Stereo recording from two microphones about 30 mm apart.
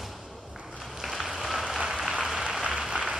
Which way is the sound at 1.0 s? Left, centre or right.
Centre.